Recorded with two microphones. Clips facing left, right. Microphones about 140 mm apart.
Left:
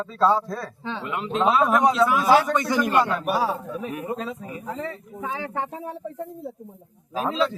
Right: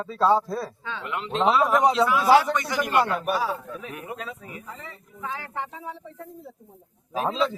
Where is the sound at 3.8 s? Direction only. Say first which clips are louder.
Left 6 dB; 30° left (ahead or behind).